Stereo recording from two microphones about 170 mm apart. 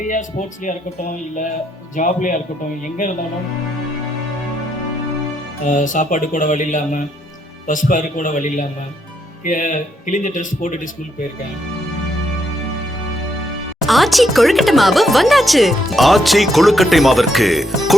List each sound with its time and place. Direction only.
0.1 s speech: 50° left (ahead or behind)
2.0 s speech: 50° left (ahead or behind)
5.6 s speech: 50° left (ahead or behind)
13.8 s speech: centre (ahead or behind)